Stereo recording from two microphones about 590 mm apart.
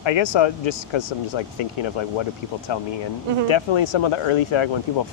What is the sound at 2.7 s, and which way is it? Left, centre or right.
Speech, left.